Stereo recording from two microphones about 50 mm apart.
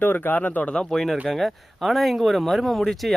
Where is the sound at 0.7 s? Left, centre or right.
Centre.